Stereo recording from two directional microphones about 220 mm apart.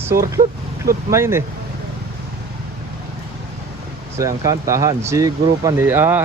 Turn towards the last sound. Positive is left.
turn(degrees=-10)  # may be behind; listen again after turning